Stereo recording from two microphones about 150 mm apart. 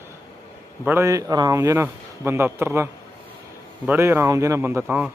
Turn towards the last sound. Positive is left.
turn(degrees=-10)  # may be behind; listen again after turning